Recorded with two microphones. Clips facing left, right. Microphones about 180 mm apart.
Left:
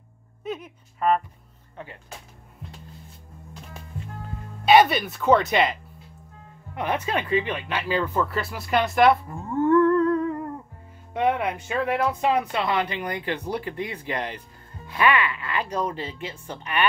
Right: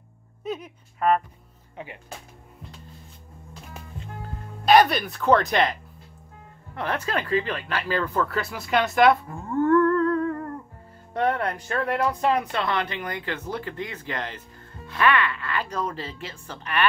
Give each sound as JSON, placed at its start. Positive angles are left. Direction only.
{"t": 4.6, "sound": "speech", "side_deg": 5}
{"t": 9.6, "sound": "humming", "side_deg": 15}
{"t": 11.1, "sound": "speech", "side_deg": 10}